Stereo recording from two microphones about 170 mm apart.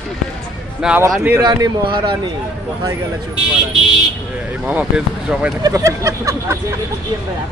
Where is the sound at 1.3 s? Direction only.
25° right (ahead or behind).